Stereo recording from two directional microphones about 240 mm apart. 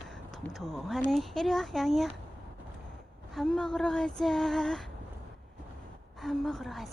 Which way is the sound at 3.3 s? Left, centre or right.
Centre.